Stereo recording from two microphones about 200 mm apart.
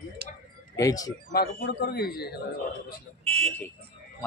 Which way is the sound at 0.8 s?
15° left (ahead or behind).